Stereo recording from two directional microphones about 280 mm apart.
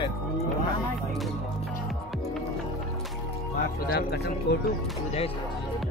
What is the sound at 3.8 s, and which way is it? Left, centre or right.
Speech, left.